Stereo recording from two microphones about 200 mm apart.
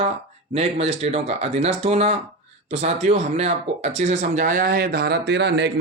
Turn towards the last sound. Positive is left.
turn(degrees=-60)  # may be behind; listen again after turning